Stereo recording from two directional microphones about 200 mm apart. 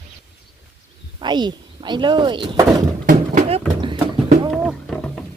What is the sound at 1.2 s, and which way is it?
Speech, 20° right (ahead or behind).